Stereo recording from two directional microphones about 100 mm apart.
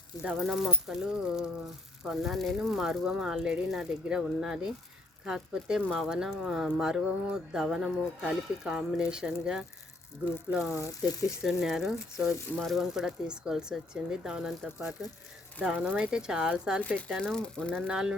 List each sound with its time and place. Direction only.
0.2 s speech: 10° right (ahead or behind)
10.7 s speech: 30° left (ahead or behind)
11.4 s speech: 5° right (ahead or behind)
17.1 s speech: centre (ahead or behind)
17.8 s speech: 5° right (ahead or behind)